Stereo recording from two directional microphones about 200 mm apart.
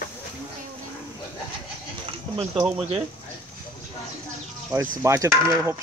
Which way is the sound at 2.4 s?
5° right (ahead or behind).